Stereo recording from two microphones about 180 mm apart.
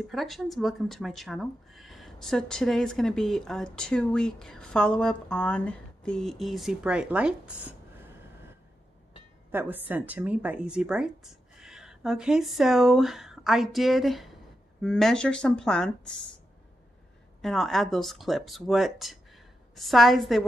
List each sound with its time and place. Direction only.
0.1 s speech: centre (ahead or behind)
9.5 s speech: 10° right (ahead or behind)
17.4 s speech: centre (ahead or behind)